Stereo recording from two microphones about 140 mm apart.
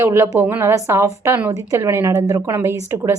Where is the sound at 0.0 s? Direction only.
20° right (ahead or behind).